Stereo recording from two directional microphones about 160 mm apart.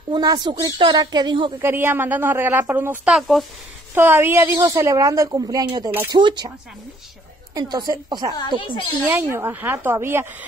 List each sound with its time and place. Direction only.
0.1 s a woman's voice: 25° right (ahead or behind)
1.6 s speech: 15° right (ahead or behind)
3.9 s a woman's voice: 15° right (ahead or behind)
7.5 s a woman's voice: 25° right (ahead or behind)